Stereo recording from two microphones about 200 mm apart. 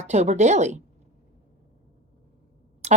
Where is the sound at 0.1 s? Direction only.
35° right (ahead or behind).